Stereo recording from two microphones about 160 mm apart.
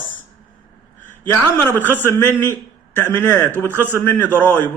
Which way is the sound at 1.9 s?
15° left (ahead or behind).